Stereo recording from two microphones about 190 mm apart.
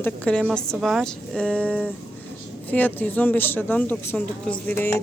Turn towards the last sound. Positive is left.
turn(degrees=10)  # may be behind; listen again after turning